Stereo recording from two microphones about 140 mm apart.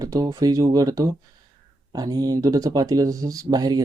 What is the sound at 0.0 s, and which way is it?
Speech, 25° right (ahead or behind).